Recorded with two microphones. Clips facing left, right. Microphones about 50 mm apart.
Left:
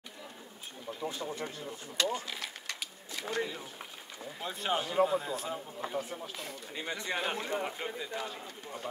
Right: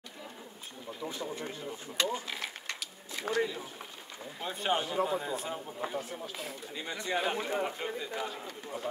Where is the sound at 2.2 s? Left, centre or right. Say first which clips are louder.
Right 2 dB; right.